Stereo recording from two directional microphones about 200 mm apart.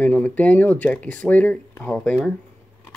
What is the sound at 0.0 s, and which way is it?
Speech, 10° left (ahead or behind).